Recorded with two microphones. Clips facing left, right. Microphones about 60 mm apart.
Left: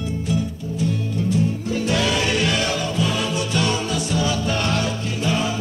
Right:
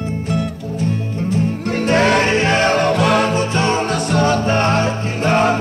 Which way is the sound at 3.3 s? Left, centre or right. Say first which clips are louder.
Right 5 dB; right.